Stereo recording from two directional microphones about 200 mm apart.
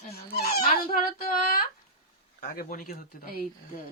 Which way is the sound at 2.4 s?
45° left (ahead or behind).